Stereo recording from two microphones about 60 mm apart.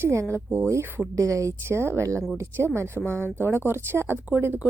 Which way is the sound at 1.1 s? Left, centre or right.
Right.